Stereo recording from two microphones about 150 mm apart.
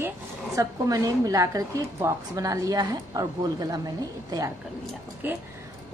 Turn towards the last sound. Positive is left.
turn(degrees=-15)  # may be behind; listen again after turning